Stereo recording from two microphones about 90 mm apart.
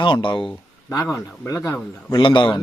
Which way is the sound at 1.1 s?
35° left (ahead or behind).